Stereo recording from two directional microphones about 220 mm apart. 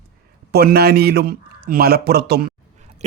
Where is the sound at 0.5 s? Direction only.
45° right (ahead or behind).